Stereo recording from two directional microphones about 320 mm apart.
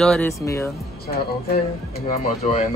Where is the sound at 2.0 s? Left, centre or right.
Left.